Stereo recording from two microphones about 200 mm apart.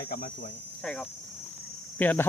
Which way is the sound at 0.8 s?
5° left (ahead or behind).